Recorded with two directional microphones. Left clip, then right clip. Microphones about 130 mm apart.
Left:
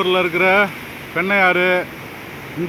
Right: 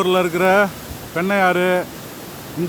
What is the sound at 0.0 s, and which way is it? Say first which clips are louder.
Speech: left 1 dB; 20° right (ahead or behind).